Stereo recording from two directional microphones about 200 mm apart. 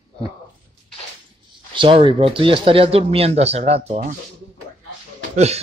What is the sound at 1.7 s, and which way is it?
Speech, 25° right (ahead or behind).